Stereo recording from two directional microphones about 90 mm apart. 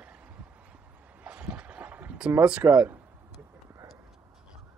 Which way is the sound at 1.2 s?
10° right (ahead or behind).